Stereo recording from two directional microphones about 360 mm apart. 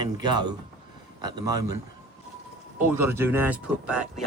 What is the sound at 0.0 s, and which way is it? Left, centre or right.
A man's voice, centre.